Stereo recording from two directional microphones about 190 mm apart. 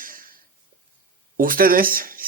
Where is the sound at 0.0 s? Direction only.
45° right (ahead or behind).